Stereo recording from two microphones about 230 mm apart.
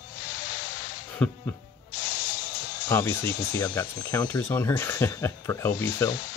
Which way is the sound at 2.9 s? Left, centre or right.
Centre.